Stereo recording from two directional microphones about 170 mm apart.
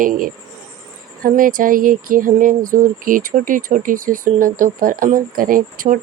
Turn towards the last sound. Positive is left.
turn(degrees=-55)  # may be behind; listen again after turning